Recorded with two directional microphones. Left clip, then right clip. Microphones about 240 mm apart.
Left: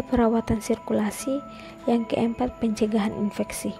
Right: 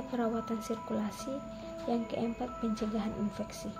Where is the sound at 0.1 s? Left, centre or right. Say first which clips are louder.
Left 12 dB; left.